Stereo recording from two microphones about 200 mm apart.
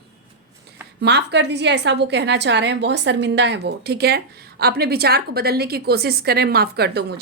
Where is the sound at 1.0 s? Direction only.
60° right (ahead or behind).